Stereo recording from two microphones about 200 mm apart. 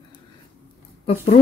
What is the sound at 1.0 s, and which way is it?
Speech, 30° left (ahead or behind).